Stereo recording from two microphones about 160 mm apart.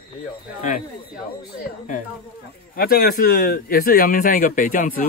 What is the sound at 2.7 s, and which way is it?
Speech, 70° left (ahead or behind).